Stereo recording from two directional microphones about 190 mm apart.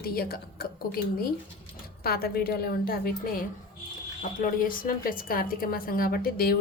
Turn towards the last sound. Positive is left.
turn(degrees=50)  # may be behind; listen again after turning